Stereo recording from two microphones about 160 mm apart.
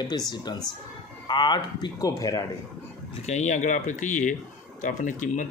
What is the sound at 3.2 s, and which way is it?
Speech, 45° left (ahead or behind).